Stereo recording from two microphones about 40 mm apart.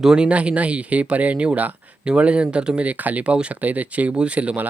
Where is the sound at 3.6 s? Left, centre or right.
Right.